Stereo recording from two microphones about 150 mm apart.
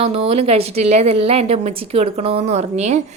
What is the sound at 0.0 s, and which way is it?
A woman's voice, 40° right (ahead or behind).